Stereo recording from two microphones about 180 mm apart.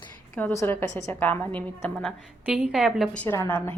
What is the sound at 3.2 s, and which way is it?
Speech, 10° left (ahead or behind).